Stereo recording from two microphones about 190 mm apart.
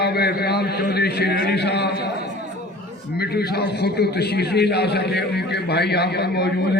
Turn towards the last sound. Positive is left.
turn(degrees=60)  # may be behind; listen again after turning